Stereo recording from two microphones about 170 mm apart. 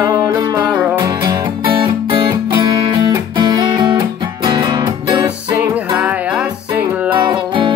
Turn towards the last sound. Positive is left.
turn(degrees=-10)  # may be behind; listen again after turning